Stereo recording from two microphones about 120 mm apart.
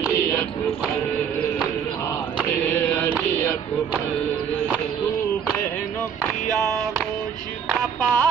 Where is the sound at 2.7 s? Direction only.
15° left (ahead or behind).